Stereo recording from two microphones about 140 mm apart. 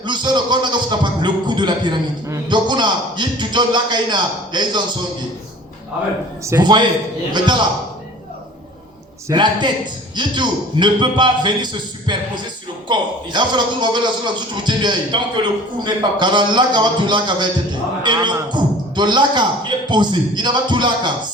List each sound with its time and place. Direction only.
0.0 s a man's voice: 35° right (ahead or behind)
6.4 s a man's voice: 25° right (ahead or behind)
9.3 s a man's voice: 30° right (ahead or behind)